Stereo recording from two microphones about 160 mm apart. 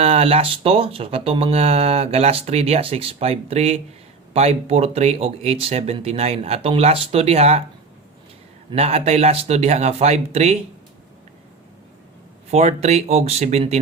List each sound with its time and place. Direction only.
0.0 s speech: 40° right (ahead or behind)
8.7 s speech: 40° right (ahead or behind)
12.5 s speech: 45° right (ahead or behind)